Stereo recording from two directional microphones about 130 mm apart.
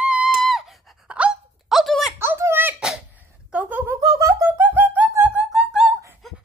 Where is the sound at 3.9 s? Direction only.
25° right (ahead or behind).